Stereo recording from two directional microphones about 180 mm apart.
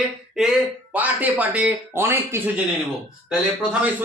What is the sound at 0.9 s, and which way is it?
A man's voice, 10° right (ahead or behind).